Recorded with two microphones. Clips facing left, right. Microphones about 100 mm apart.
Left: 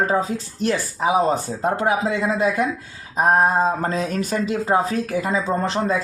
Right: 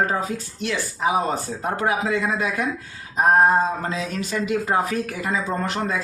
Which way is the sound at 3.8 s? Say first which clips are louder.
Left 4 dB; 45° left (ahead or behind).